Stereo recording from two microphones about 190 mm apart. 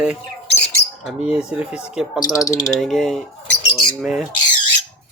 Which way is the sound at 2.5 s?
20° left (ahead or behind).